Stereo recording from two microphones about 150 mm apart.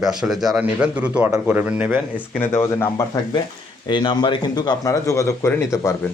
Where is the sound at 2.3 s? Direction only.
15° left (ahead or behind).